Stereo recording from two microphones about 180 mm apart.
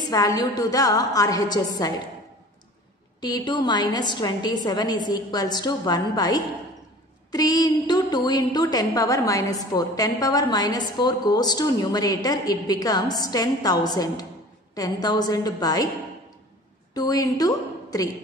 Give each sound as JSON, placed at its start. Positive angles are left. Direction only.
{"t": 0.1, "sound": "a woman's voice", "side_deg": 20}
{"t": 3.2, "sound": "a woman's voice", "side_deg": 25}
{"t": 16.9, "sound": "a woman's voice", "side_deg": 20}